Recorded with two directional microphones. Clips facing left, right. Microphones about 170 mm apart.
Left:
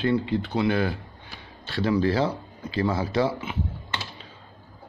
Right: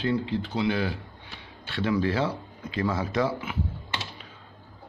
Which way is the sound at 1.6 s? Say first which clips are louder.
Left 3 dB; 35° left (ahead or behind).